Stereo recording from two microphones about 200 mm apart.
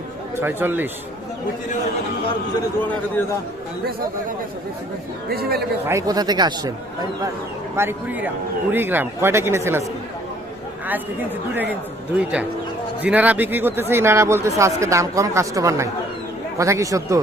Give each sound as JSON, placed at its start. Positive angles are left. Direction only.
{"t": 0.3, "sound": "speech", "side_deg": -10}
{"t": 5.3, "sound": "a man's voice", "side_deg": -50}
{"t": 5.8, "sound": "speech", "side_deg": -15}
{"t": 7.8, "sound": "speech", "side_deg": -10}
{"t": 11.5, "sound": "speech", "side_deg": -10}